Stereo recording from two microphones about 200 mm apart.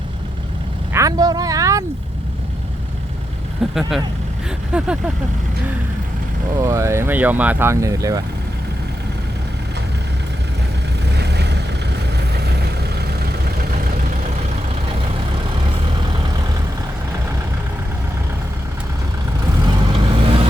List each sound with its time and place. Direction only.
0.9 s speech: 15° right (ahead or behind)
3.8 s speech: centre (ahead or behind)
6.6 s speech: 15° right (ahead or behind)
11.1 s vehicle: 55° right (ahead or behind)
19.6 s vehicle: 25° right (ahead or behind)